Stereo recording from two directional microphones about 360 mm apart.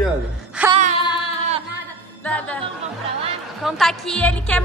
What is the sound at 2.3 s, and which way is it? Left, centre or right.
Music, centre.